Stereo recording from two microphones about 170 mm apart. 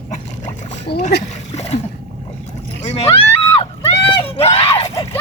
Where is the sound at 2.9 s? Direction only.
35° left (ahead or behind).